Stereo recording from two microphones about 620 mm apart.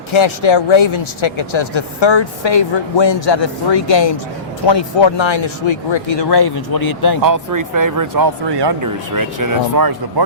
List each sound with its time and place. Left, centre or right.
0.1 s speech: left
7.2 s speech: right